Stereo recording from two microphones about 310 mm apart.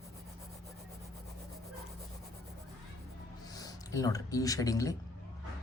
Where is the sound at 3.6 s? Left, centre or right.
Centre.